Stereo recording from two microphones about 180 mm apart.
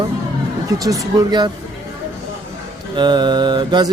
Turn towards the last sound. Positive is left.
turn(degrees=-25)  # may be behind; listen again after turning